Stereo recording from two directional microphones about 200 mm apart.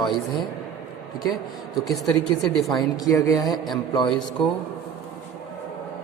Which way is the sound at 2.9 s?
15° left (ahead or behind).